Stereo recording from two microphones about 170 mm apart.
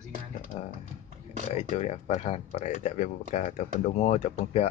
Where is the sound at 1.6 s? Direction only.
40° left (ahead or behind).